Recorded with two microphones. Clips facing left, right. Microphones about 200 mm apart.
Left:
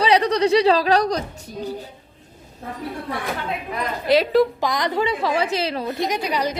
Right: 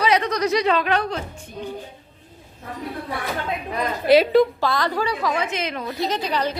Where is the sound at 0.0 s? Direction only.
30° left (ahead or behind).